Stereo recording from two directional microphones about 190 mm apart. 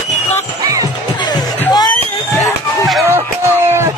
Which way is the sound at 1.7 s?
20° left (ahead or behind).